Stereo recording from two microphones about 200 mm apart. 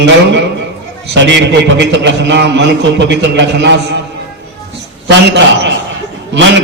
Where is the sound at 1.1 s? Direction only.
60° right (ahead or behind).